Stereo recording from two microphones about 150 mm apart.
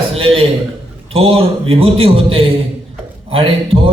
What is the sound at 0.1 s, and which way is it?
A man's voice, 40° right (ahead or behind).